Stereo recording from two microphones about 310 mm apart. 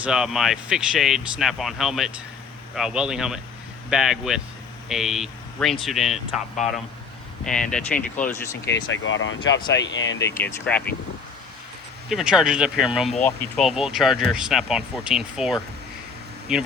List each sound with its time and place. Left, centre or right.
0.0 s speech: centre
7.7 s speech: centre
8.6 s speech: left
10.2 s speech: centre
12.0 s speech: centre